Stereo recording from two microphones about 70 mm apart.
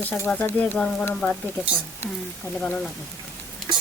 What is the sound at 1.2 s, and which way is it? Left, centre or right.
Speech, centre.